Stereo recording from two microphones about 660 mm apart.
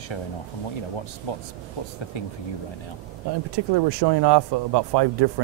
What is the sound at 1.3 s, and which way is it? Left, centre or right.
Speech, left.